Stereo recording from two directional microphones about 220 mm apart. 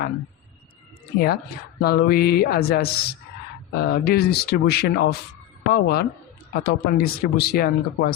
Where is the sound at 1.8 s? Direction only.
45° left (ahead or behind).